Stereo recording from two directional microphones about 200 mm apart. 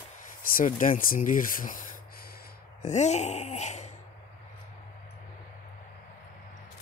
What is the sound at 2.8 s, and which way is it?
Wail, 35° left (ahead or behind).